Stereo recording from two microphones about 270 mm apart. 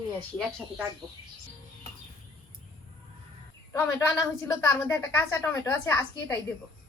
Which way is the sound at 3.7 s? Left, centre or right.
Centre.